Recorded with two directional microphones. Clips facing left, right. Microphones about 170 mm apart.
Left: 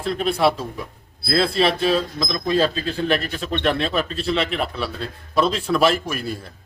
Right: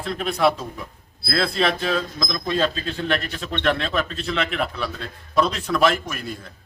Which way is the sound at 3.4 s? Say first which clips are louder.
Left 2 dB; 30° left (ahead or behind).